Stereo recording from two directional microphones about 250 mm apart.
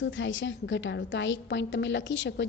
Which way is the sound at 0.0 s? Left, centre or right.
Left.